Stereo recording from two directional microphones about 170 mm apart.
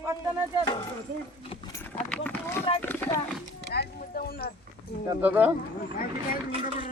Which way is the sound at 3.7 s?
65° left (ahead or behind).